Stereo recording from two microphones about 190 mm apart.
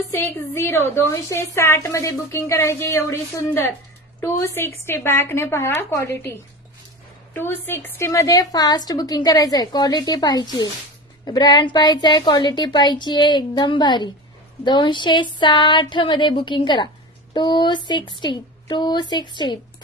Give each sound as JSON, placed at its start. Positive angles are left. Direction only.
{"t": 0.1, "sound": "a woman's voice", "side_deg": 15}
{"t": 7.3, "sound": "a woman's voice", "side_deg": 10}